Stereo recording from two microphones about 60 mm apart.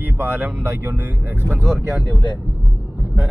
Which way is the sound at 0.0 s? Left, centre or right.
Right.